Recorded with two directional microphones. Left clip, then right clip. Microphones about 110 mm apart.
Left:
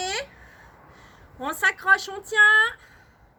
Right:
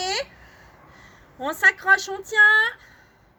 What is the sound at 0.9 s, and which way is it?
A woman's voice, 15° right (ahead or behind).